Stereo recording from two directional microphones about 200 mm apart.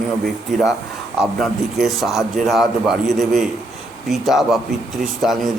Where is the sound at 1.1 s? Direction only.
Centre (ahead or behind).